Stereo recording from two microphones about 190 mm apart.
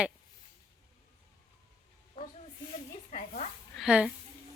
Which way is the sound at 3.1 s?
35° left (ahead or behind).